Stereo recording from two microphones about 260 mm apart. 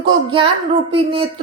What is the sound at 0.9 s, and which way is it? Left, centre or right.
Female singing, right.